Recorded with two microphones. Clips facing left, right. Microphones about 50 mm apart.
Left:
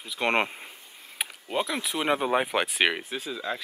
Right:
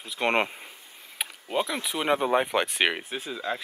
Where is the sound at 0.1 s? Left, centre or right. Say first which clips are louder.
Even; centre.